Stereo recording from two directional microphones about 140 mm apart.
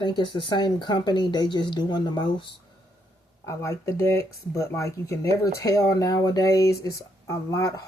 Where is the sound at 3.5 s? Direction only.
20° left (ahead or behind).